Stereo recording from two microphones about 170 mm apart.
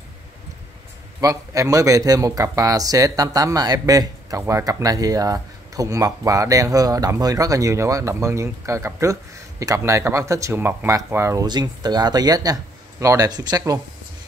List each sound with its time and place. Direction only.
1.2 s speech: 20° right (ahead or behind)